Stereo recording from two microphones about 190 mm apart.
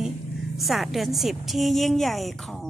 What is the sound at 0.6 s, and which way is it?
A woman's voice, centre (ahead or behind).